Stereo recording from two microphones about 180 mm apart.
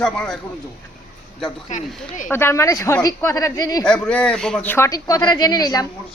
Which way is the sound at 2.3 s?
15° left (ahead or behind).